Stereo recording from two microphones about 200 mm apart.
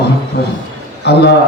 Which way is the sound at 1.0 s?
55° left (ahead or behind).